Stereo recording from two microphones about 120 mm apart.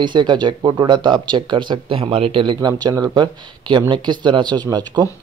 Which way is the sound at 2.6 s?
35° right (ahead or behind).